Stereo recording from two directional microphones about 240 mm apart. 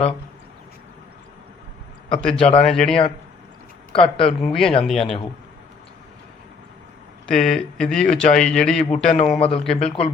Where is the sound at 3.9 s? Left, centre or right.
Left.